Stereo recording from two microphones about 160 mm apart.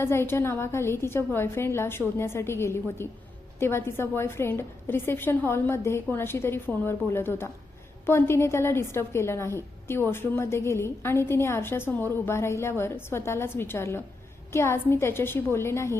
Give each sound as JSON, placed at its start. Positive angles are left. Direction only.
{"t": 0.0, "sound": "a woman's voice", "side_deg": 15}